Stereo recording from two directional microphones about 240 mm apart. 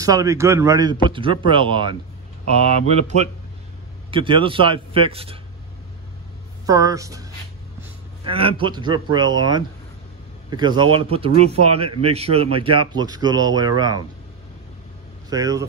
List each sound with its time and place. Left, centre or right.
0.0 s a man's voice: centre
6.6 s a man's voice: centre
15.2 s speech: centre